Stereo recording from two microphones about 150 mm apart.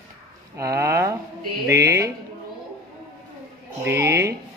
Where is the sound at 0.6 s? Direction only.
20° right (ahead or behind).